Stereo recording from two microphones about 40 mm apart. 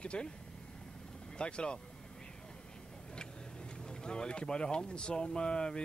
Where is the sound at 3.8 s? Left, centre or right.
Centre.